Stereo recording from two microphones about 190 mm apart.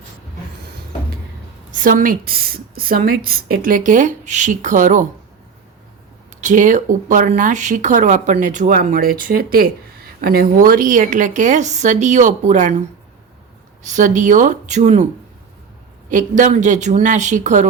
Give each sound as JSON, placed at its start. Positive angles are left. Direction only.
{"t": 1.7, "sound": "a woman's voice", "side_deg": -45}
{"t": 6.4, "sound": "speech", "side_deg": -40}
{"t": 13.8, "sound": "speech", "side_deg": -40}
{"t": 16.0, "sound": "speech", "side_deg": -40}